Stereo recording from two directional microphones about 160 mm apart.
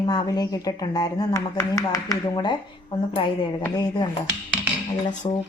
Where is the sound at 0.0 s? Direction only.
25° left (ahead or behind).